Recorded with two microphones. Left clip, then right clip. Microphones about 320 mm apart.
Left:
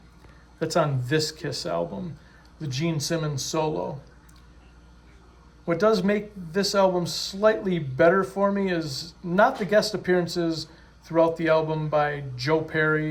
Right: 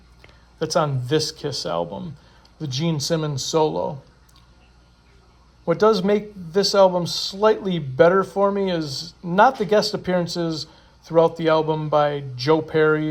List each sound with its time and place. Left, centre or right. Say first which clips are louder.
0.6 s speech: right 3 dB; centre
2.6 s speech: right 3 dB; centre
5.6 s speech: right 4 dB; centre